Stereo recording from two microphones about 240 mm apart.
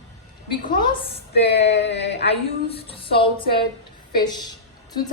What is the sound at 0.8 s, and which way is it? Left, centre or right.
Speech, left.